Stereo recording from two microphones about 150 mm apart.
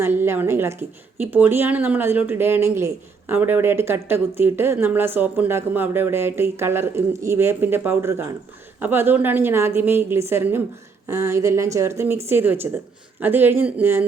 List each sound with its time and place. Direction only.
0.0 s a woman's voice: 15° right (ahead or behind)